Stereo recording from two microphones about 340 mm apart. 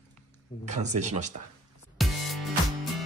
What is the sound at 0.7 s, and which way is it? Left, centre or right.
Speech, centre.